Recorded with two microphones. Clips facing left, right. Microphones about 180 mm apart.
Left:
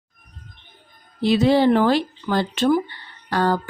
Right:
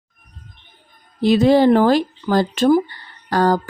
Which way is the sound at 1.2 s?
45° right (ahead or behind).